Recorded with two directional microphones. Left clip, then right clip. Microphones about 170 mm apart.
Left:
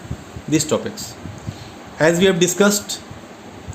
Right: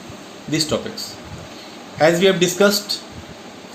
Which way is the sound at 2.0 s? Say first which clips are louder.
Right 1 dB; 65° left (ahead or behind).